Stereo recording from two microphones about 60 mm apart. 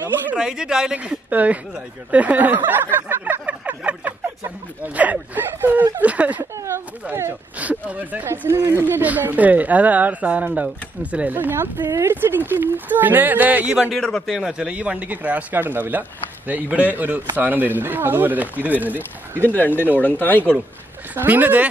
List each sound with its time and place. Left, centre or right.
0.4 s speech: centre
0.9 s speech: right
3.1 s a sound: right
4.8 s speech: right
6.5 s a sound: right
7.5 s speech: right
8.5 s speech: right
9.0 s speech: right
11.3 s speech: right
13.7 s speech: centre
13.9 s a man's voice: centre
14.3 s speech: centre; by 19.5 s right
19.5 s speech: left
21.1 s speech: right